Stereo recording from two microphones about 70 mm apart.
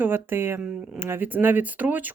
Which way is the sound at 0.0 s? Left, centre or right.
Right.